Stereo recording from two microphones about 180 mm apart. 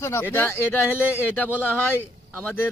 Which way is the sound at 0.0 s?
15° left (ahead or behind).